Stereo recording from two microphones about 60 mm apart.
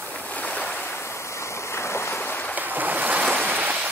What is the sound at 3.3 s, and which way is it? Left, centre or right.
Rain, right.